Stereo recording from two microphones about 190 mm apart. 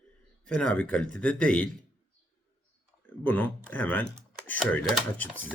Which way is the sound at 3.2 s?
10° left (ahead or behind).